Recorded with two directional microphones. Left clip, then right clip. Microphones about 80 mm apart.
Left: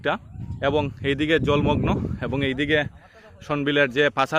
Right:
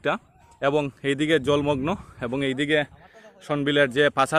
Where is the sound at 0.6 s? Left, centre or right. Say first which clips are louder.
Even; right.